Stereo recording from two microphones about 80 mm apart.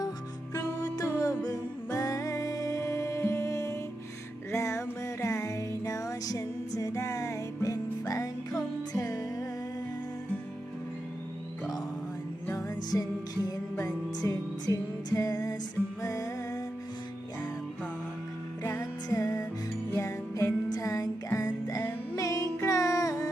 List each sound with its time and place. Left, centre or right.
0.5 s music: left
12.5 s music: left
18.6 s music: left